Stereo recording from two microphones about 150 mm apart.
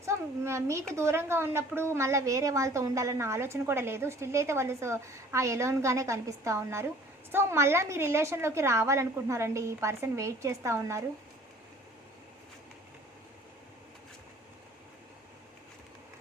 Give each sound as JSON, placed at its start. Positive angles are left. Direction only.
{"t": 0.0, "sound": "a woman's voice", "side_deg": -20}